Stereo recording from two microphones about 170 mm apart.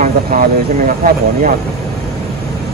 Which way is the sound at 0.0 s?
50° right (ahead or behind).